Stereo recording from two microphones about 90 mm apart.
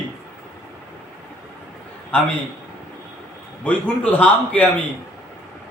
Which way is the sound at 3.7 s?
15° left (ahead or behind).